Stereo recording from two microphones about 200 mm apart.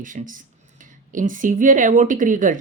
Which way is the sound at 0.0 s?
40° right (ahead or behind).